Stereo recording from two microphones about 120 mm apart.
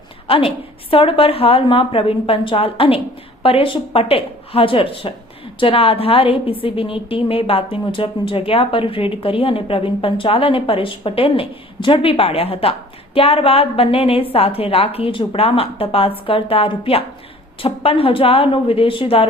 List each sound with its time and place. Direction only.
0.3 s a woman's voice: 50° left (ahead or behind)